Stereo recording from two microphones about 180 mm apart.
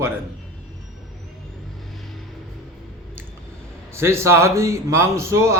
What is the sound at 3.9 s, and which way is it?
Speech, 15° right (ahead or behind).